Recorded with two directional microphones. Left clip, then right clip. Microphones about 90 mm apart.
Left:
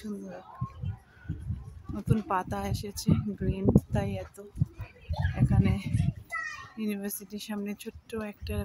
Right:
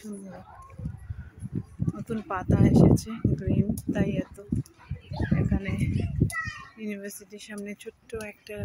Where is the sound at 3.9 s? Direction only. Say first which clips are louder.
Right 4 dB; 10° left (ahead or behind).